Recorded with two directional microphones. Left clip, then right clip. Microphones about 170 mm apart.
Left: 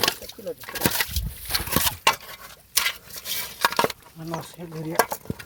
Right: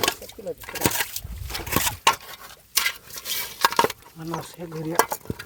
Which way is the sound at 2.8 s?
20° right (ahead or behind).